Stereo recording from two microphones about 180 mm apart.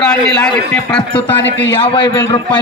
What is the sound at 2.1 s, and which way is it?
Speech, 15° left (ahead or behind).